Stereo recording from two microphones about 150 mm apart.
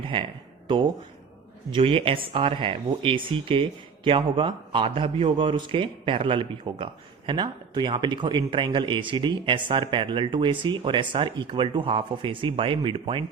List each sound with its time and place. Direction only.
0.1 s a man's voice: 35° right (ahead or behind)
1.7 s a man's voice: 35° right (ahead or behind)